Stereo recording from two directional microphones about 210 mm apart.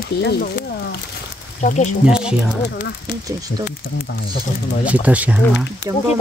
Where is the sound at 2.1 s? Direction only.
5° right (ahead or behind).